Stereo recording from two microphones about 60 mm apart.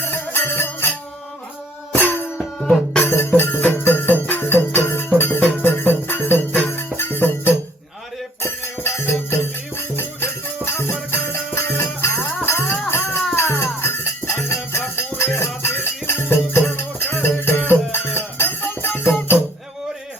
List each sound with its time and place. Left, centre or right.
0.0 s music: left
2.0 s music: left
2.6 s music: centre
3.0 s music: left
3.6 s jingle bell: left
4.7 s music: left